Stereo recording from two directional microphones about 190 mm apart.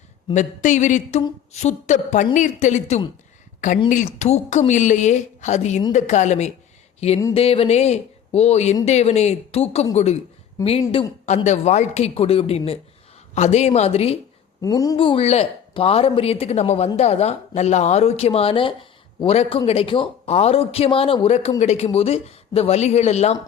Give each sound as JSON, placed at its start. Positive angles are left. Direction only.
{"t": 0.3, "sound": "speech", "side_deg": 40}
{"t": 14.6, "sound": "speech", "side_deg": 20}